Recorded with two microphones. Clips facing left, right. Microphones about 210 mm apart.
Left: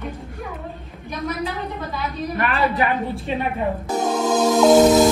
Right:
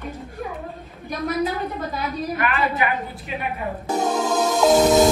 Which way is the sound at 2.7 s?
30° left (ahead or behind).